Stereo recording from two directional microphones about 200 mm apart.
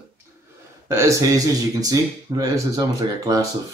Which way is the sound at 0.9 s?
15° right (ahead or behind).